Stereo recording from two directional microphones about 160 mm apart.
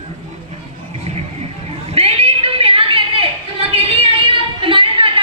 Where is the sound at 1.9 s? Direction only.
40° right (ahead or behind).